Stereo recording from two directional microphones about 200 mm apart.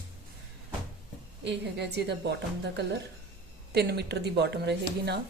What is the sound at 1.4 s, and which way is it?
Speech, 60° right (ahead or behind).